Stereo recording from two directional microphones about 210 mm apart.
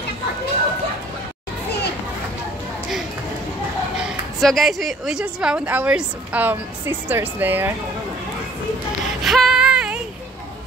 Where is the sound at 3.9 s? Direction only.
Centre (ahead or behind).